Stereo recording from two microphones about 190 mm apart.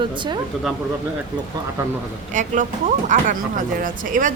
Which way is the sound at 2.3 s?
45° right (ahead or behind).